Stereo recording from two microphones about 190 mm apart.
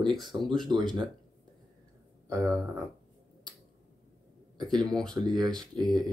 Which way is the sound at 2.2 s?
15° right (ahead or behind).